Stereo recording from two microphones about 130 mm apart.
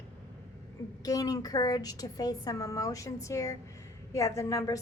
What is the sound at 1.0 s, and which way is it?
A woman's voice, 30° left (ahead or behind).